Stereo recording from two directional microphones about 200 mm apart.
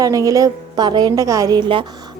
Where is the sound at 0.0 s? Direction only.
15° right (ahead or behind).